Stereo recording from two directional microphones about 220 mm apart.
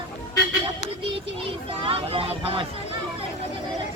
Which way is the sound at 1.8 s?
25° right (ahead or behind).